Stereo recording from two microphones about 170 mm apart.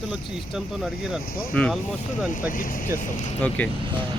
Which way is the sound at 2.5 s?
55° left (ahead or behind).